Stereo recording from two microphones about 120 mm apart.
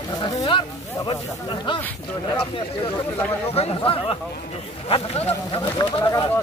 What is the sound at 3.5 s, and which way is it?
Speech, 50° left (ahead or behind).